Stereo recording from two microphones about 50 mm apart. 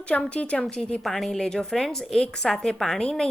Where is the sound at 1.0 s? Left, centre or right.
Centre.